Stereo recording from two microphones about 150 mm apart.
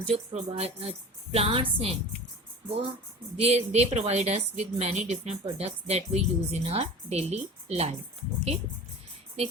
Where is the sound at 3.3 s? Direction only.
45° right (ahead or behind).